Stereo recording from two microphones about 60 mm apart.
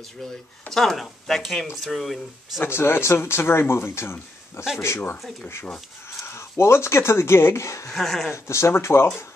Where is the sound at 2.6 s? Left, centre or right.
Left.